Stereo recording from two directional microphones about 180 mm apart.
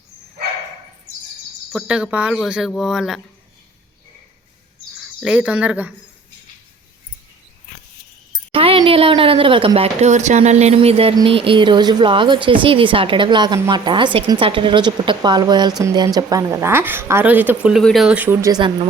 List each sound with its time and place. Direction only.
1.7 s speech: 5° right (ahead or behind)
4.9 s speech: centre (ahead or behind)
8.5 s a woman's voice: 30° right (ahead or behind)